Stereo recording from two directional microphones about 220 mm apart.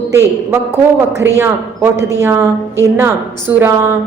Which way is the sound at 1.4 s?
10° right (ahead or behind).